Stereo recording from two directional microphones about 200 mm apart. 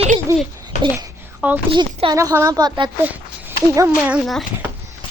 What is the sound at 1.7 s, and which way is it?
A woman's voice, 25° right (ahead or behind).